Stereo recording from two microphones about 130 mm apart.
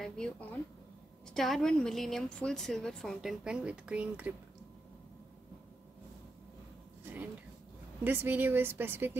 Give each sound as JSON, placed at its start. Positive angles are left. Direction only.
{"t": 0.0, "sound": "a woman's voice", "side_deg": 10}
{"t": 8.0, "sound": "a woman's voice", "side_deg": -15}